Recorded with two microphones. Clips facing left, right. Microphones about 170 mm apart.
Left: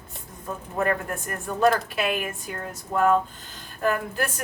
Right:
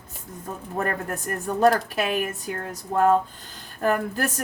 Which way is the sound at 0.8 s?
40° right (ahead or behind).